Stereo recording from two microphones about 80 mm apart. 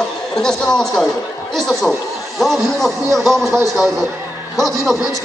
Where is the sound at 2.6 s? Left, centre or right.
Centre.